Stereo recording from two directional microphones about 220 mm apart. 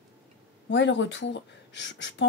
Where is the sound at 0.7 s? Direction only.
55° left (ahead or behind).